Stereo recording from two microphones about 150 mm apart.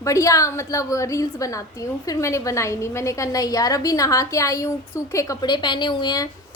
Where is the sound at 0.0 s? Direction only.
20° left (ahead or behind).